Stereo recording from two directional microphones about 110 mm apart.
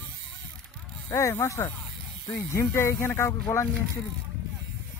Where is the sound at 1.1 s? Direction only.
25° left (ahead or behind).